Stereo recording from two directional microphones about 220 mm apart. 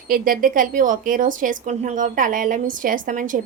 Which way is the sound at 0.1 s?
40° right (ahead or behind).